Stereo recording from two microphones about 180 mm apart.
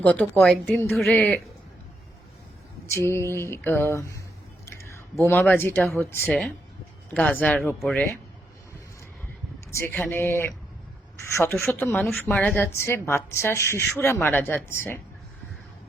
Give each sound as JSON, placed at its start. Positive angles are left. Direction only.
{"t": 0.0, "sound": "a woman's voice", "side_deg": 10}
{"t": 2.9, "sound": "a woman's voice", "side_deg": 15}
{"t": 4.6, "sound": "a sound", "side_deg": 15}
{"t": 5.2, "sound": "a woman's voice", "side_deg": 10}
{"t": 9.7, "sound": "a woman's voice", "side_deg": 10}
{"t": 11.7, "sound": "a woman's voice", "side_deg": 10}